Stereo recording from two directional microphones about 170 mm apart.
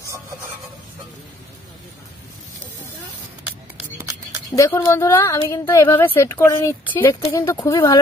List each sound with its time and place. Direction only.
4.5 s a woman's voice: 15° left (ahead or behind)